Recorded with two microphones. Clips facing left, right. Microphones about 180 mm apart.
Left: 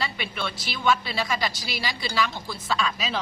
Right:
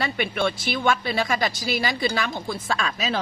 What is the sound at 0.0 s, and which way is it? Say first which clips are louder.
A woman's voice: right 7 dB; 50° right (ahead or behind).